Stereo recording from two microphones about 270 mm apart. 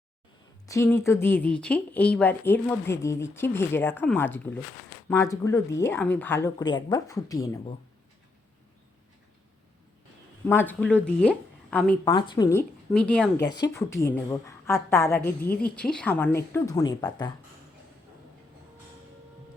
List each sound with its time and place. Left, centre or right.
0.7 s speech: centre
10.4 s speech: centre
12.1 s speech: centre
13.4 s speech: centre
15.4 s speech: left
15.7 s speech: centre